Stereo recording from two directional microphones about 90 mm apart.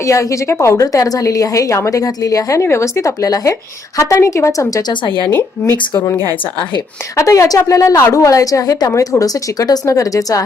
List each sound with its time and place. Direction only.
0.0 s a woman's voice: 35° left (ahead or behind)
4.9 s a woman's voice: 60° left (ahead or behind)
5.3 s a woman's voice: 30° left (ahead or behind)
7.2 s a woman's voice: 35° left (ahead or behind)